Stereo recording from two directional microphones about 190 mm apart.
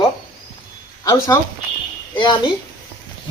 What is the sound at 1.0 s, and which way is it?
A woman's voice, 20° left (ahead or behind).